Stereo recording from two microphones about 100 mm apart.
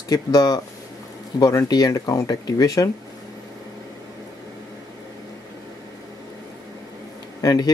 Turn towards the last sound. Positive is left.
turn(degrees=40)  # may be behind; listen again after turning